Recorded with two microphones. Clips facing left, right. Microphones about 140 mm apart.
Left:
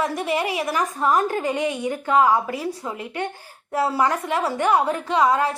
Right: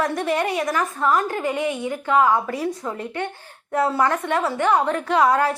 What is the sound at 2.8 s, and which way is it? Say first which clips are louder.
Speech: right 2 dB; 10° left (ahead or behind).